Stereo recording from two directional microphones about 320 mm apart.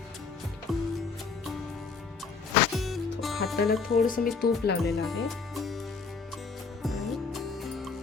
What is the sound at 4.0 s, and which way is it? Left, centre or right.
Speech, left.